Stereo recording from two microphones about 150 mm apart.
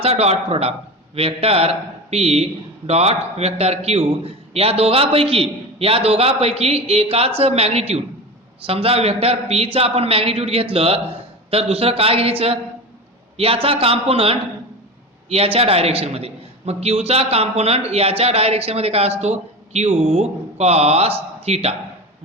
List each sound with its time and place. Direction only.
0.0 s a man's voice: 45° right (ahead or behind)